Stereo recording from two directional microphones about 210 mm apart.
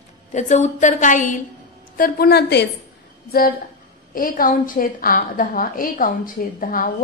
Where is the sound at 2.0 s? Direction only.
45° left (ahead or behind).